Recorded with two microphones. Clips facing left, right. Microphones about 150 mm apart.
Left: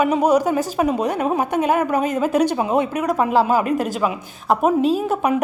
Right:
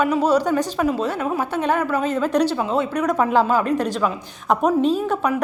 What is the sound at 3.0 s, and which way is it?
A woman's voice, 5° left (ahead or behind).